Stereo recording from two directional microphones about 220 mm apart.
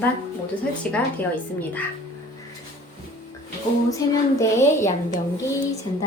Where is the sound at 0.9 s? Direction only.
5° left (ahead or behind).